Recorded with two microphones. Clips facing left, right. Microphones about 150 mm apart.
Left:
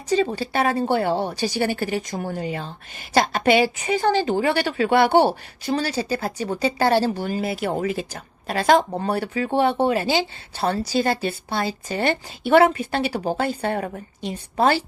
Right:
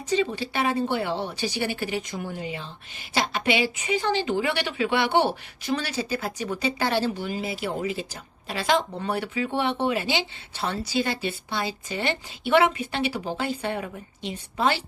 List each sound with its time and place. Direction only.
0.1 s a woman's voice: 40° left (ahead or behind)